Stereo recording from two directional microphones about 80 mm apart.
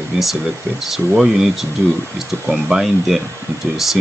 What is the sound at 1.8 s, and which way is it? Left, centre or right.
Speech, right.